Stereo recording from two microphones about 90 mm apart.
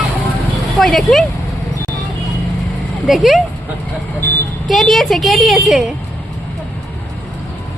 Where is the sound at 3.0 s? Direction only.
Centre (ahead or behind).